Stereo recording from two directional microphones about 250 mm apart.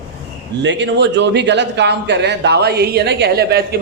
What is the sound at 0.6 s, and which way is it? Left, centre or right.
A man's voice, right.